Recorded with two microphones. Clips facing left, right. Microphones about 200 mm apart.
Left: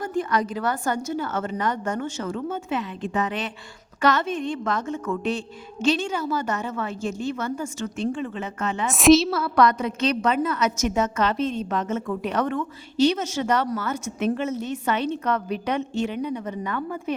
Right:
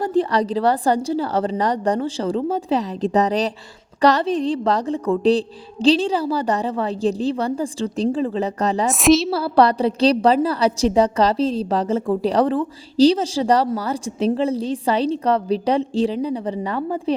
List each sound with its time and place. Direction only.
0.0 s a woman's voice: 35° right (ahead or behind)
8.9 s a woman's voice: centre (ahead or behind)
9.3 s a woman's voice: 30° right (ahead or behind)